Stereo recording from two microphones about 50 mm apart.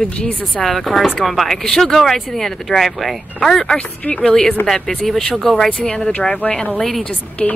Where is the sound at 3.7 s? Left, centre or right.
Left.